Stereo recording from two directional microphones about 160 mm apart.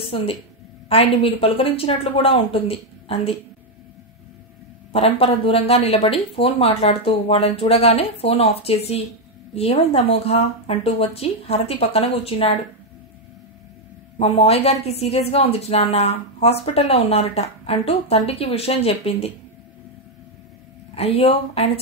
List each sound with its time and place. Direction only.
0.1 s a woman's voice: 40° left (ahead or behind)
4.9 s a woman's voice: 40° left (ahead or behind)
14.1 s a woman's voice: 40° left (ahead or behind)
20.9 s a woman's voice: 40° left (ahead or behind)